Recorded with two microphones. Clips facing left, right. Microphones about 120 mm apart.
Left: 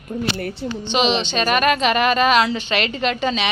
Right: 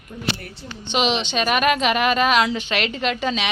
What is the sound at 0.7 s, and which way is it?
A woman's voice, 5° right (ahead or behind).